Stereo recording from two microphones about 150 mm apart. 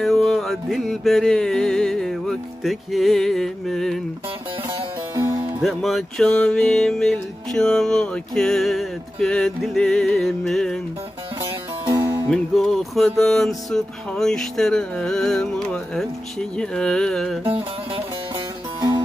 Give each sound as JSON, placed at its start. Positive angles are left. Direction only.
{"t": 0.0, "sound": "music", "side_deg": 0}
{"t": 5.1, "sound": "music", "side_deg": -25}
{"t": 5.6, "sound": "music", "side_deg": 0}
{"t": 11.8, "sound": "music", "side_deg": -25}
{"t": 12.3, "sound": "music", "side_deg": 0}
{"t": 17.4, "sound": "music", "side_deg": -15}
{"t": 18.3, "sound": "music", "side_deg": -30}